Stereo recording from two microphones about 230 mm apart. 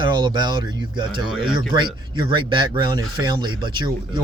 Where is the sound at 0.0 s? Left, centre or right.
Centre.